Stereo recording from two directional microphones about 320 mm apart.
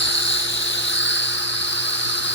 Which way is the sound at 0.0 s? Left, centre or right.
Left.